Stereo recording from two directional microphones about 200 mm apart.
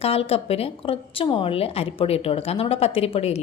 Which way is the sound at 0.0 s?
30° left (ahead or behind).